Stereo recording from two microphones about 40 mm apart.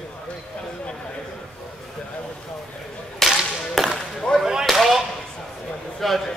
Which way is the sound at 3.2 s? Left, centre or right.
Centre.